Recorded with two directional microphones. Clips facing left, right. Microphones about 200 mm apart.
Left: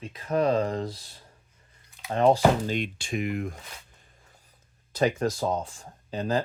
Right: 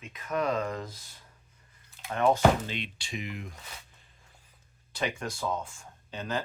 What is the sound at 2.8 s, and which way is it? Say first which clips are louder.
Speech: left 8 dB; 50° left (ahead or behind).